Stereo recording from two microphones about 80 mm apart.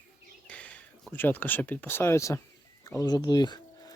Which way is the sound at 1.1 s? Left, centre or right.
Left.